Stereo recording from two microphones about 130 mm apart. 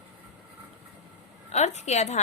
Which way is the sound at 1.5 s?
60° left (ahead or behind).